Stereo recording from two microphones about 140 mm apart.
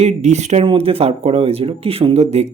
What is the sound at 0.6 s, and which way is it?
Speech, 40° right (ahead or behind).